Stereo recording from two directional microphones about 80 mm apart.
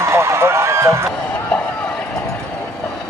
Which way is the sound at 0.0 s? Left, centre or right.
Right.